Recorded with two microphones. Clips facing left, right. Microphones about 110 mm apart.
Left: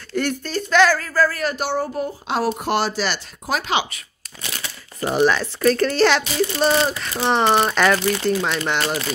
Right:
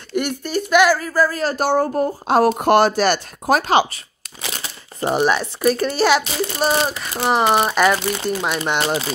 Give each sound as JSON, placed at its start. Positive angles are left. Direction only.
{"t": 0.1, "sound": "speech", "side_deg": -15}
{"t": 1.4, "sound": "speech", "side_deg": -40}
{"t": 5.0, "sound": "speech", "side_deg": -20}